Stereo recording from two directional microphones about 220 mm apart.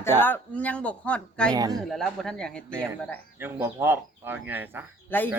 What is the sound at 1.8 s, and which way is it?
Speech, centre (ahead or behind).